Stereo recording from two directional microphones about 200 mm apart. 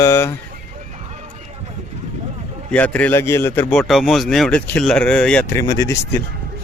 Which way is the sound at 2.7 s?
5° left (ahead or behind).